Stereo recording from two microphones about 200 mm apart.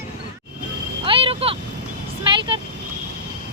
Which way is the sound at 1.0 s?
30° right (ahead or behind).